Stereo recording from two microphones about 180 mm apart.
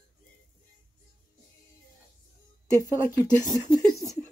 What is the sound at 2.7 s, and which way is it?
Speech, 20° left (ahead or behind).